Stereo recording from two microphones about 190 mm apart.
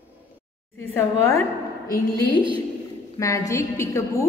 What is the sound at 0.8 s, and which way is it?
A woman's voice, 10° left (ahead or behind).